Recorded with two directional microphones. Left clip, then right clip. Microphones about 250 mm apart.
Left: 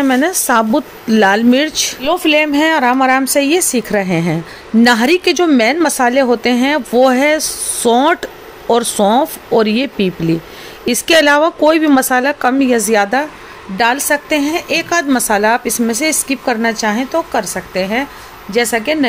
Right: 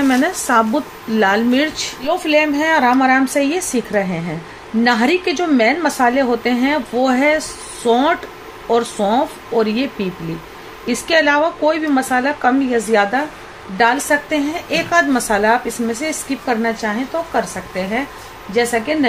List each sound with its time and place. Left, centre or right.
0.0 s a woman's voice: left